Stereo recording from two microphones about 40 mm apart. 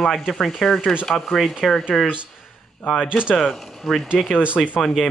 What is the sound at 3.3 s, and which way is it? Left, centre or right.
Speech, centre.